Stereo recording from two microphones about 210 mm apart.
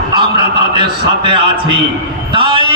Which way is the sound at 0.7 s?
20° right (ahead or behind).